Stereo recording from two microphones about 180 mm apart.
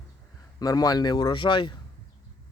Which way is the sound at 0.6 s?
20° left (ahead or behind).